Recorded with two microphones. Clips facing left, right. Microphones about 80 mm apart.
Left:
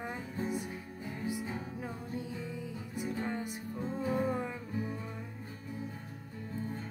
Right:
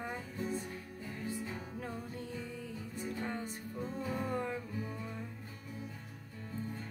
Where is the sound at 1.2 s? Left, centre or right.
Centre.